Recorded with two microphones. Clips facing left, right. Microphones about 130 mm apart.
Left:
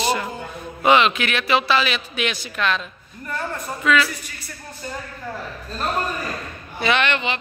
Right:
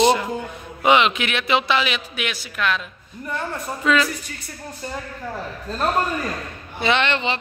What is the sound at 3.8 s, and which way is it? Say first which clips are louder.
Speech: even; 30° right (ahead or behind).